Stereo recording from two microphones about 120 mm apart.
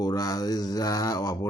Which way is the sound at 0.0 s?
30° left (ahead or behind).